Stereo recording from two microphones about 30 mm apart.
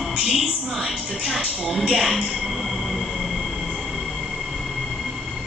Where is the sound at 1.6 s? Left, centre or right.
Centre.